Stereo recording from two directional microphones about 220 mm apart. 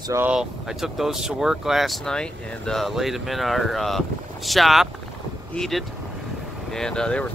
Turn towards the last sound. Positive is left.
turn(degrees=5)  # may be behind; listen again after turning